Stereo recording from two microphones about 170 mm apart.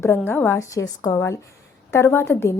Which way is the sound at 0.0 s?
15° left (ahead or behind).